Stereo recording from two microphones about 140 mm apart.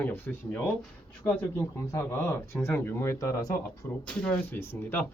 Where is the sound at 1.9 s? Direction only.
20° left (ahead or behind).